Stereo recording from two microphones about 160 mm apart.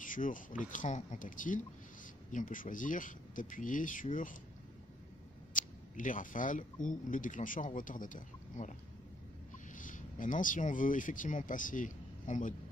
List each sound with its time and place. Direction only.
0.0 s speech: 55° left (ahead or behind)
5.5 s speech: 55° left (ahead or behind)
9.8 s speech: 55° left (ahead or behind)